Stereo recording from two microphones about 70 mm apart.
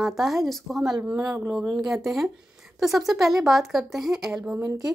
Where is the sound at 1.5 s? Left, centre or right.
Centre.